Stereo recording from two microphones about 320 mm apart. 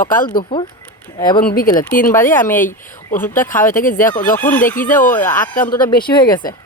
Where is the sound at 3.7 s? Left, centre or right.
Left.